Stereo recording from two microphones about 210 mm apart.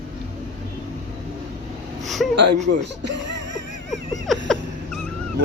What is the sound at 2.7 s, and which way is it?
Speech, 55° right (ahead or behind).